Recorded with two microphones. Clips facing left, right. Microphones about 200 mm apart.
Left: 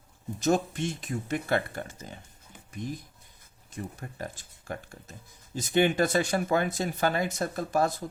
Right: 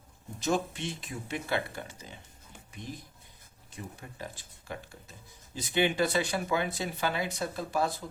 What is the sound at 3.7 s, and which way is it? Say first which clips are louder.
Speech: left 5 dB; 50° left (ahead or behind).